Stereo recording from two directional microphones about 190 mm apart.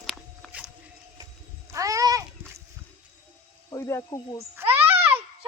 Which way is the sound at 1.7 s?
15° right (ahead or behind).